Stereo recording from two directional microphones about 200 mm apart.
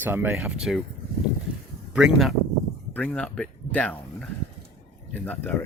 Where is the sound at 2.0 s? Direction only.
5° right (ahead or behind).